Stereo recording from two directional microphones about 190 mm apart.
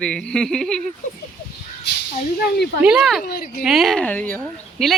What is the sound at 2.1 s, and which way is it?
Speech, 50° left (ahead or behind).